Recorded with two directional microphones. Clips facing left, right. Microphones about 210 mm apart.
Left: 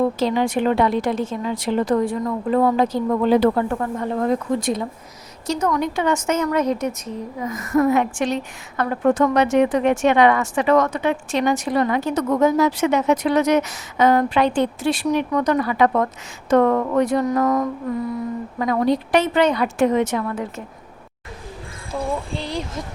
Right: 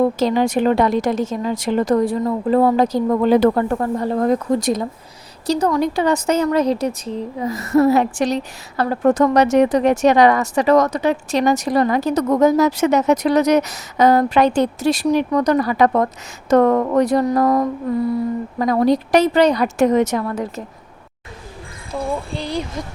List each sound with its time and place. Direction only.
0.2 s a woman's voice: 40° right (ahead or behind)
21.9 s speech: centre (ahead or behind)